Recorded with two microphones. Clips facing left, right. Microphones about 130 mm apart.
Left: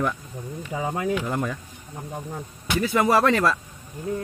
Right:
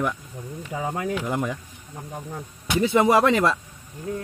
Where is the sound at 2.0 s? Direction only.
5° left (ahead or behind).